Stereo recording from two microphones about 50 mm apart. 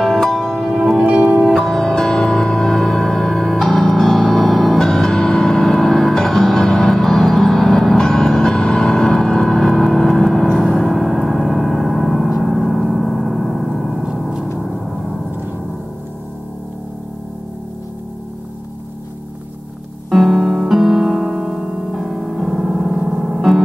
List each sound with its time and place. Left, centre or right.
0.0 s music: centre
0.7 s music: centre
1.0 s music: right
1.5 s music: centre
14.6 s gong: centre
20.1 s music: centre